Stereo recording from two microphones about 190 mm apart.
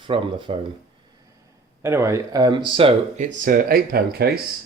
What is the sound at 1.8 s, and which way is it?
Speech, 15° right (ahead or behind).